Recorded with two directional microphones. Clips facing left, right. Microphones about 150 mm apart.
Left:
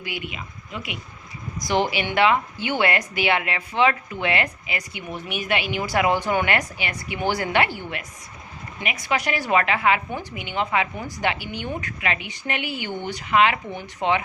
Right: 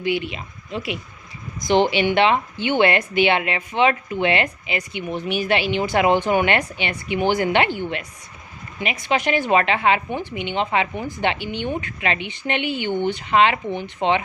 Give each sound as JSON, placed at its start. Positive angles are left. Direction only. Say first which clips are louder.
{"t": 0.0, "sound": "a woman's voice", "louder": "right 9 dB", "side_deg": -30}